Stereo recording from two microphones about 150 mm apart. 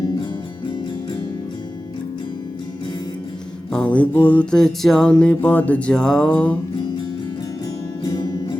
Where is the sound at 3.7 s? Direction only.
5° left (ahead or behind).